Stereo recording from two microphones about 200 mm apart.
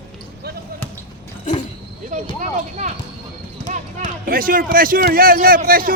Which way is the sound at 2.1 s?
40° right (ahead or behind).